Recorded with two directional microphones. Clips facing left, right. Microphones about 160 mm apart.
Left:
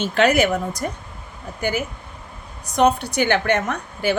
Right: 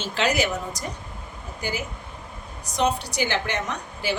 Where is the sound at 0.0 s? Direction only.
55° left (ahead or behind).